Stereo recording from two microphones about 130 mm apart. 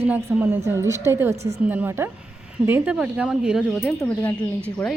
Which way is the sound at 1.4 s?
55° right (ahead or behind).